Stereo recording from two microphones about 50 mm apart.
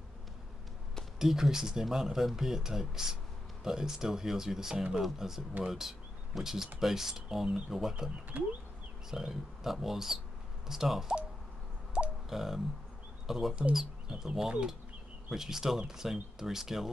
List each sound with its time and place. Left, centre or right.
1.2 s speech: centre
8.3 s speech: right
9.1 s speech: centre
12.3 s speech: centre